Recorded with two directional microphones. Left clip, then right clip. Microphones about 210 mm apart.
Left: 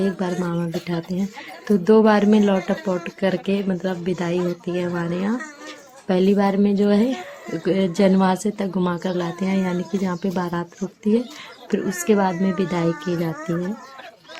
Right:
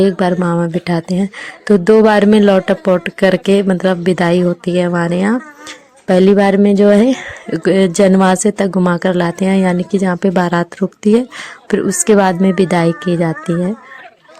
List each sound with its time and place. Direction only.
0.0 s speech: 40° right (ahead or behind)